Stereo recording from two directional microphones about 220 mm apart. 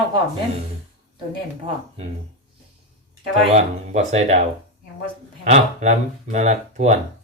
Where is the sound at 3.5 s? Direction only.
30° right (ahead or behind).